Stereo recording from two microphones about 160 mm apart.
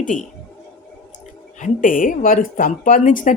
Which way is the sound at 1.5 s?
55° left (ahead or behind).